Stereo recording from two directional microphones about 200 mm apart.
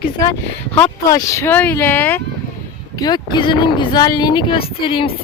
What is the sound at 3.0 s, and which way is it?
Speech, 20° left (ahead or behind).